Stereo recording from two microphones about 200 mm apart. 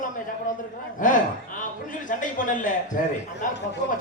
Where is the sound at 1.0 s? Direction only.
40° left (ahead or behind).